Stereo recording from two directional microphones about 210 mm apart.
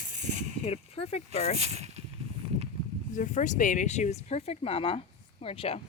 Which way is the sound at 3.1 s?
35° left (ahead or behind).